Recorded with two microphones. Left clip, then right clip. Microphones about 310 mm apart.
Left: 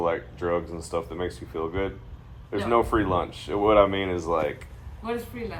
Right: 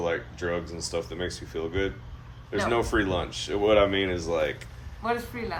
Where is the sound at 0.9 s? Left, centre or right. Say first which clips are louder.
Left 3 dB; centre.